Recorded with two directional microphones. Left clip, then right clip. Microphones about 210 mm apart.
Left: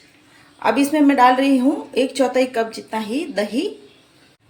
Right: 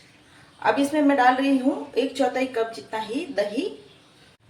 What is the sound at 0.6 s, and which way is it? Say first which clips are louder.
Speech: left 4 dB; 55° left (ahead or behind).